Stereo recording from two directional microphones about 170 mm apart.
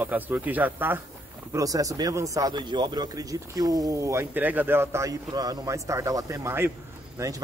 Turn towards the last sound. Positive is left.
turn(degrees=-20)  # may be behind; listen again after turning